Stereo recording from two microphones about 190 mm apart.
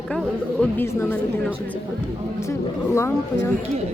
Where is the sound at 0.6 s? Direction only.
10° left (ahead or behind).